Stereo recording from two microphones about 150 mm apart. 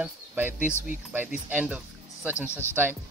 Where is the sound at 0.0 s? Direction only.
10° right (ahead or behind).